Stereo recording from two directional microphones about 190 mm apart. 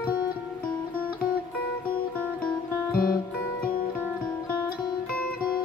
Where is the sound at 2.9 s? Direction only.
50° left (ahead or behind).